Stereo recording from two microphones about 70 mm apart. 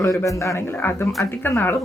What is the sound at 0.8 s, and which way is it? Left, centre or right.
Speech, left.